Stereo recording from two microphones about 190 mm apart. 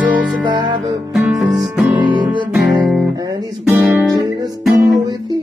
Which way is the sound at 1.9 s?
25° right (ahead or behind).